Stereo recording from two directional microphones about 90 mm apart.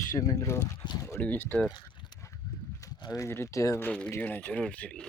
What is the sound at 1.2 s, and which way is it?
Speech, 15° left (ahead or behind).